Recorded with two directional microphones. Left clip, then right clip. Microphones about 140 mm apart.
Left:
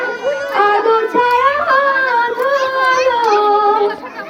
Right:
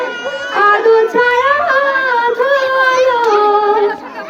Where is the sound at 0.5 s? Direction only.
30° right (ahead or behind).